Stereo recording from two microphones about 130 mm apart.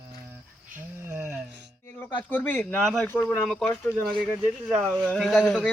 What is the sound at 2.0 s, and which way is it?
A man's voice, 15° left (ahead or behind).